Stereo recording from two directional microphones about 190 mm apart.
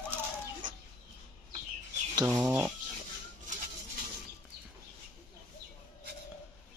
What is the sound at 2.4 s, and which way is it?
Speech, 5° right (ahead or behind).